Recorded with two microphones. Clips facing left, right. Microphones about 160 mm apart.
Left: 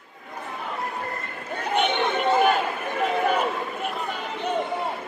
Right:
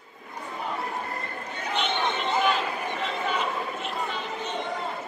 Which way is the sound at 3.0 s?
55° left (ahead or behind).